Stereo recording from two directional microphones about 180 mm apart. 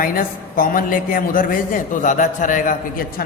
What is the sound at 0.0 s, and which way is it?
A woman's voice, 50° left (ahead or behind).